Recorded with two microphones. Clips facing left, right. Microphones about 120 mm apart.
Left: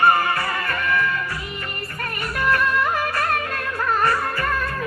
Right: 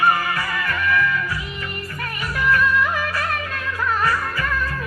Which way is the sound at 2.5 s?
40° left (ahead or behind).